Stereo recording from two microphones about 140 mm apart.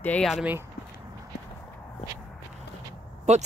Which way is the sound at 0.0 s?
10° left (ahead or behind).